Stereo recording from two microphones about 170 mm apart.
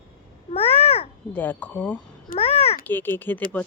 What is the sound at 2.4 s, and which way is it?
Speech, 35° left (ahead or behind).